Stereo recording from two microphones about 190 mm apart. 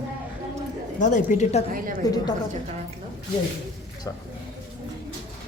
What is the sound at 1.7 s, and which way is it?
Speech, 45° right (ahead or behind).